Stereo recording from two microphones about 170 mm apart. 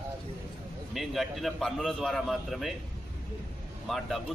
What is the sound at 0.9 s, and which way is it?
A man's voice, centre (ahead or behind).